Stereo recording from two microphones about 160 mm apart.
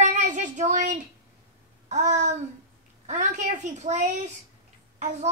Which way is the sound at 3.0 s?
50° right (ahead or behind).